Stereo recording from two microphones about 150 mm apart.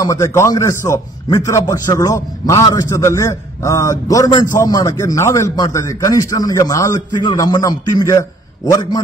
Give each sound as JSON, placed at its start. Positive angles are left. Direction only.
{"t": 0.0, "sound": "speech", "side_deg": 20}